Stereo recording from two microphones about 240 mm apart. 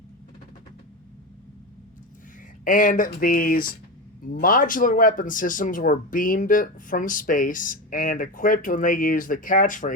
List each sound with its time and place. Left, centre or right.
2.6 s speech: left